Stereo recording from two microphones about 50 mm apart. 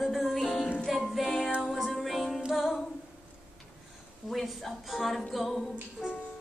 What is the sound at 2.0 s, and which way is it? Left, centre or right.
Music, centre.